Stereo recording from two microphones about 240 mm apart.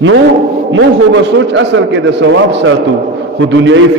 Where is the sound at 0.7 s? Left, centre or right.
Right.